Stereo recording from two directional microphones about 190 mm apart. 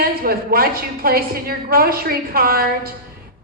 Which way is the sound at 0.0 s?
50° right (ahead or behind).